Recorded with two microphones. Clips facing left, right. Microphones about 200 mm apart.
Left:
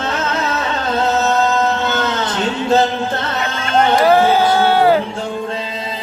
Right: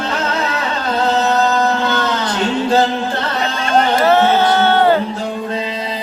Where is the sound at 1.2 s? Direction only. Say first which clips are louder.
Right 1 dB; 25° left (ahead or behind).